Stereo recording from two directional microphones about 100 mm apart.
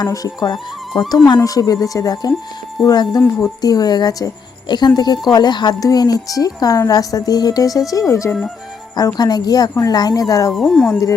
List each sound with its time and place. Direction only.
0.0 s a woman's voice: 40° left (ahead or behind)
10.5 s speech: centre (ahead or behind)